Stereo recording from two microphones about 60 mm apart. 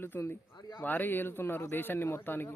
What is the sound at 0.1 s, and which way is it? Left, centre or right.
A man's voice, left.